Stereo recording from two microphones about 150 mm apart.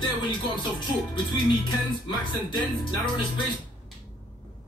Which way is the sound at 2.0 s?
30° left (ahead or behind).